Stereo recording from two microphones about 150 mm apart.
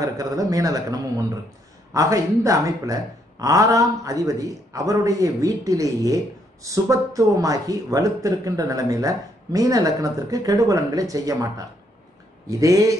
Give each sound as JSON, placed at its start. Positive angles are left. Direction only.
{"t": 0.0, "sound": "speech", "side_deg": -20}